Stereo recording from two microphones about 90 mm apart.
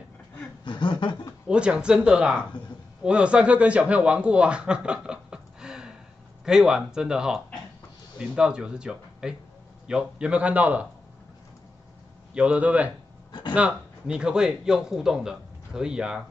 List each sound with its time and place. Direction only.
0.7 s a sound: 60° left (ahead or behind)
1.5 s a man's voice: 10° right (ahead or behind)
12.4 s a man's voice: 15° right (ahead or behind)
13.3 s speech: 55° left (ahead or behind)
13.6 s a man's voice: 10° right (ahead or behind)